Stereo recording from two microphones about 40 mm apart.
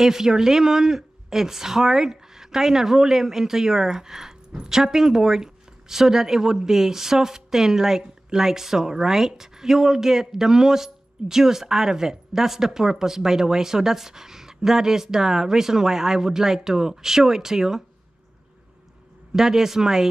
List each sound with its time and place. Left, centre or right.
0.0 s speech: centre
19.3 s speech: centre